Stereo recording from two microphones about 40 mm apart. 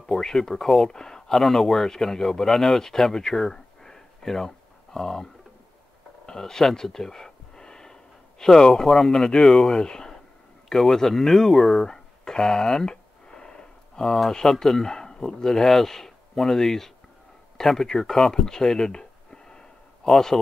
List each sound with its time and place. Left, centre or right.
0.0 s speech: centre
6.6 s gasp: centre
9.1 s speech: centre
9.4 s speech: centre
9.8 s speech: centre
11.8 s a sound: centre
14.3 s speech: centre
18.3 s a sound: centre
20.1 s speech: centre